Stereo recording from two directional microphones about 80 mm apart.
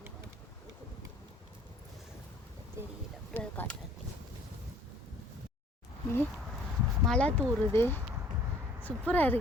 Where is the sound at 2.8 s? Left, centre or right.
Right.